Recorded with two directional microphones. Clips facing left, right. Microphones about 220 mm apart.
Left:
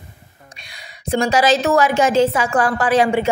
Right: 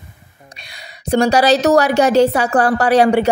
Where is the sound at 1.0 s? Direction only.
40° right (ahead or behind).